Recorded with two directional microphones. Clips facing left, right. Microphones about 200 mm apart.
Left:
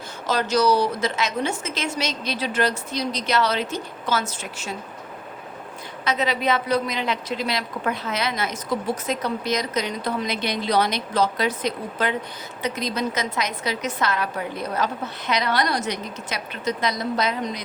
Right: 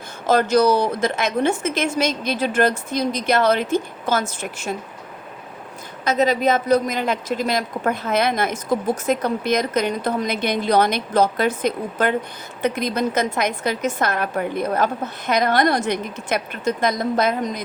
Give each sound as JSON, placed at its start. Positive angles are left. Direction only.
{"t": 0.3, "sound": "speech", "side_deg": -50}
{"t": 6.1, "sound": "speech", "side_deg": -45}